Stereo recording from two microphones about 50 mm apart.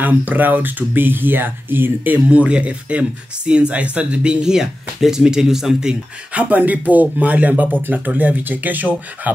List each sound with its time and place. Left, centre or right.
0.0 s speech: right; by 5.9 s centre
6.3 s speech: right